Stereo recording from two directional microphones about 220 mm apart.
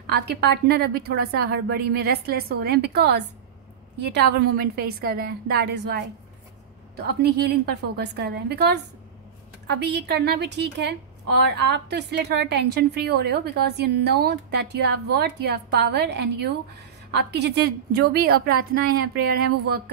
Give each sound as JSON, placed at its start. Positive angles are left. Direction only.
{"t": 0.0, "sound": "a woman's voice", "side_deg": -50}